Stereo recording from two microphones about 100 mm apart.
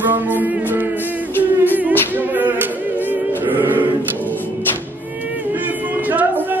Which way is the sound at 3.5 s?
20° right (ahead or behind).